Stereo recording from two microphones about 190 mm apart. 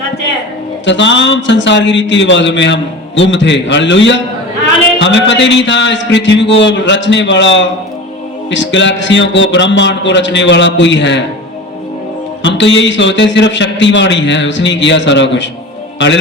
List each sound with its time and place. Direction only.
0.9 s a man's voice: 70° left (ahead or behind)
12.4 s a man's voice: 70° left (ahead or behind)